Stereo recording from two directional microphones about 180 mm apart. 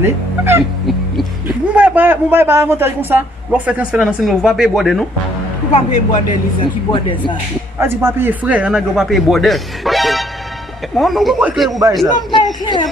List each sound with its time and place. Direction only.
0.0 s speech: 15° right (ahead or behind)
1.8 s a man's voice: 10° right (ahead or behind)
6.6 s speech: 25° left (ahead or behind)
7.8 s a man's voice: 15° right (ahead or behind)